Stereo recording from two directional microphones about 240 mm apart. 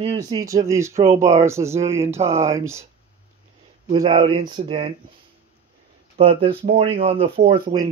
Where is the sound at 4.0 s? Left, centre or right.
Centre.